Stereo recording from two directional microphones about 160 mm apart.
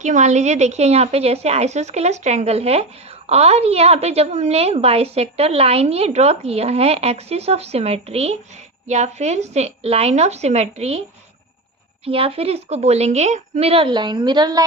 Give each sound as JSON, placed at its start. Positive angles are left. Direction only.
{"t": 0.0, "sound": "a woman's voice", "side_deg": -50}
{"t": 12.0, "sound": "a woman's voice", "side_deg": -35}